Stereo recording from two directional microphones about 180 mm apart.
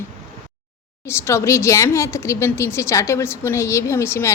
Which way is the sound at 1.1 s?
15° left (ahead or behind).